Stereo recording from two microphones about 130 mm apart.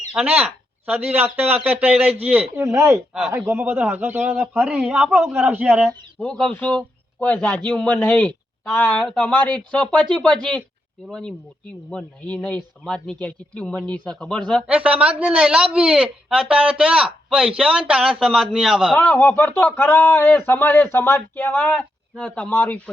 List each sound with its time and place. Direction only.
0.1 s speech: 5° right (ahead or behind)
2.7 s speech: 25° right (ahead or behind)
3.1 s speech: centre (ahead or behind)
3.3 s speech: 20° right (ahead or behind)
4.6 s speech: 5° right (ahead or behind)
5.9 s a man's voice: 10° left (ahead or behind)
14.7 s speech: 10° right (ahead or behind)
18.9 s speech: 15° left (ahead or behind)